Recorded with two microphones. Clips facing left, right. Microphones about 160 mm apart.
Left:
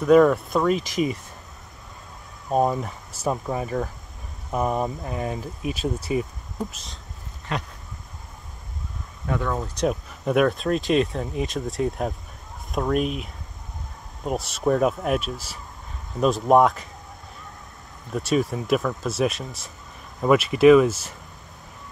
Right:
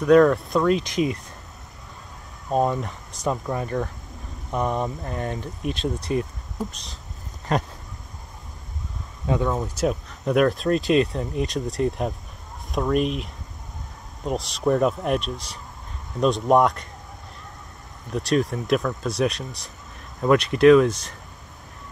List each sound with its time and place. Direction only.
0.0 s speech: 5° left (ahead or behind)
2.5 s speech: 5° left (ahead or behind)
7.5 s speech: 40° right (ahead or behind)
9.3 s speech: 20° right (ahead or behind)
9.8 s speech: centre (ahead or behind)
18.1 s speech: centre (ahead or behind)